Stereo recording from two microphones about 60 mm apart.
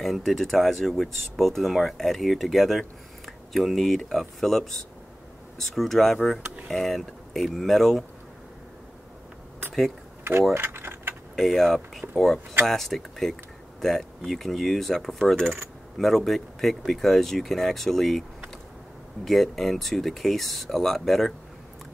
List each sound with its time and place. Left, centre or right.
0.0 s speech: centre
10.5 s a sound: right
11.3 s speech: centre
15.4 s speech: right
16.0 s speech: centre
19.2 s speech: centre